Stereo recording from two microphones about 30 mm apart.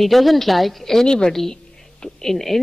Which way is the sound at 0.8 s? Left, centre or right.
Centre.